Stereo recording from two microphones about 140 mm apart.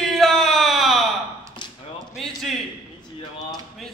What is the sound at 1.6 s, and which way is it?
Tap, 35° left (ahead or behind).